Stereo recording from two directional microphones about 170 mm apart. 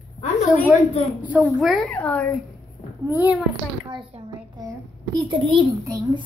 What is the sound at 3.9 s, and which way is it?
A child's voice, 30° right (ahead or behind).